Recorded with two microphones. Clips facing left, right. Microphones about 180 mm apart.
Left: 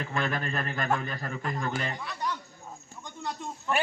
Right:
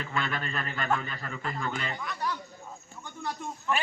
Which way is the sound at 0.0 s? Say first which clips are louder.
Left 2 dB; 45° left (ahead or behind).